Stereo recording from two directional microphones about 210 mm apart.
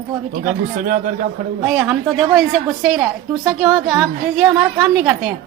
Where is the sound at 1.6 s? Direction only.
Centre (ahead or behind).